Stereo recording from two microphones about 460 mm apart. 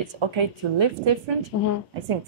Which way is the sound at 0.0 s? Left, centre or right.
Right.